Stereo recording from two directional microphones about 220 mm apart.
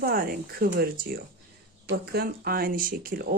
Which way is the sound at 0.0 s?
40° right (ahead or behind).